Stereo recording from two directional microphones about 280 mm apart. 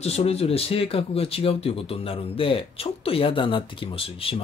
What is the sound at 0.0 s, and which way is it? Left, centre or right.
Speech, left.